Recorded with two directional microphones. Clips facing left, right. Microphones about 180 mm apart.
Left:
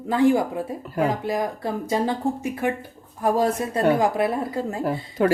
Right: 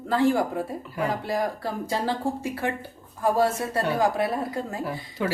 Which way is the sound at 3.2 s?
20° left (ahead or behind).